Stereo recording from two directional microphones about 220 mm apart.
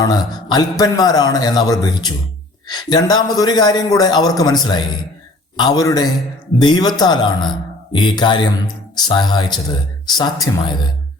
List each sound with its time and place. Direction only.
0.0 s a man's voice: 20° left (ahead or behind)